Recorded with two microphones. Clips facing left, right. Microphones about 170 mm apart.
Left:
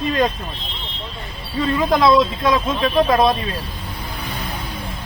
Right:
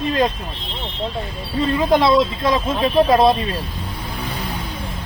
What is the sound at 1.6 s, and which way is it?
Speech, 30° right (ahead or behind).